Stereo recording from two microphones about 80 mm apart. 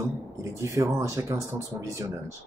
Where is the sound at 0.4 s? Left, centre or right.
Right.